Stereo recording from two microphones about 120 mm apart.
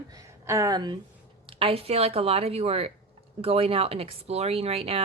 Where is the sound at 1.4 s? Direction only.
50° right (ahead or behind).